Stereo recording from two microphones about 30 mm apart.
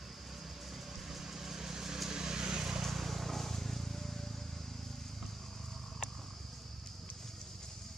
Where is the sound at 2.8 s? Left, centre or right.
Centre.